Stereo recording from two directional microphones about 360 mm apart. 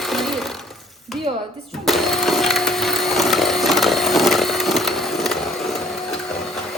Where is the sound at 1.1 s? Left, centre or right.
Centre.